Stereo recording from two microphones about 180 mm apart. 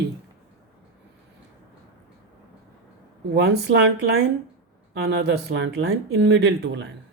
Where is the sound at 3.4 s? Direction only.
65° right (ahead or behind).